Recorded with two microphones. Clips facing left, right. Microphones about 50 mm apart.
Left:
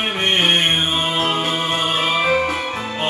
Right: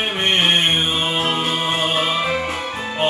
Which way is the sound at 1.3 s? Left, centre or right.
Left.